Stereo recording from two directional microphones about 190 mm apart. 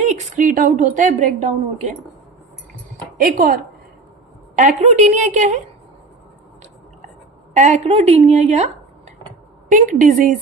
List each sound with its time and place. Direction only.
0.0 s a woman's voice: 40° right (ahead or behind)
3.2 s a woman's voice: 45° right (ahead or behind)
7.5 s a woman's voice: 35° right (ahead or behind)